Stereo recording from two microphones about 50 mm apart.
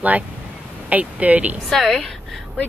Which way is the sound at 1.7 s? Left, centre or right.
Centre.